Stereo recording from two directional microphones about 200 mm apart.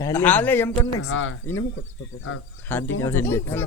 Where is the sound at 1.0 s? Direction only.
80° left.